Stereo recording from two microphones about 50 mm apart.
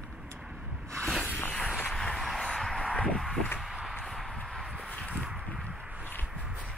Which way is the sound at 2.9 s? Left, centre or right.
Left.